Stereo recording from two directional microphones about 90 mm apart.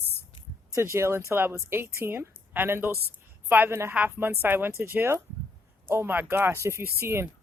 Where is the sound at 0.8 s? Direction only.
30° right (ahead or behind).